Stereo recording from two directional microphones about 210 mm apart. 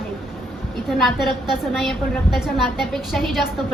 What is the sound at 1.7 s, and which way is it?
A woman's voice, centre (ahead or behind).